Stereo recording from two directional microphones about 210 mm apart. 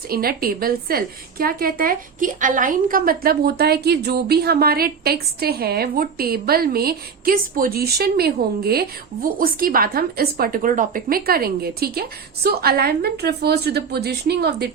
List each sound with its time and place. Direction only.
0.1 s a woman's voice: 45° right (ahead or behind)